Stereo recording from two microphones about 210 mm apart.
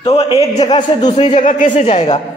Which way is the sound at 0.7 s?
20° left (ahead or behind).